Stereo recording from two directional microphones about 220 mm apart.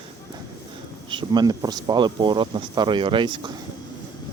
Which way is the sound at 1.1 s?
20° right (ahead or behind).